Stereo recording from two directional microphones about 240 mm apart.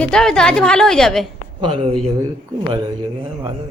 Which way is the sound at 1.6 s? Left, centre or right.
Right.